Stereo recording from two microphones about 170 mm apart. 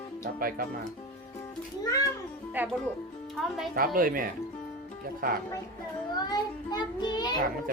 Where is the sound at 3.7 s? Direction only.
55° right (ahead or behind).